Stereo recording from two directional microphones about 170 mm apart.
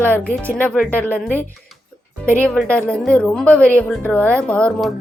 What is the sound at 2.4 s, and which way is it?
A woman's voice, 5° left (ahead or behind).